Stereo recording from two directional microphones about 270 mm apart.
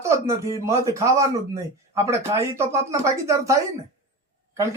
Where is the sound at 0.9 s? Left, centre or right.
Centre.